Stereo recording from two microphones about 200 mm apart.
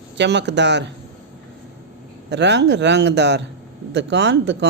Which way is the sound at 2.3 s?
60° right (ahead or behind).